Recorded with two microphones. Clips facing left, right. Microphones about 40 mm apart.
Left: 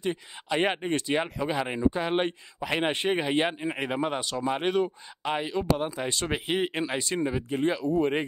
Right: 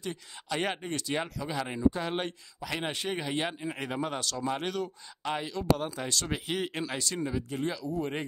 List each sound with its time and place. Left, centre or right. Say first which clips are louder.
0.0 s speech: left 7 dB; left